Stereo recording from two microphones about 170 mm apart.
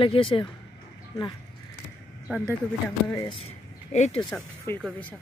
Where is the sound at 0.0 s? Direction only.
30° left (ahead or behind).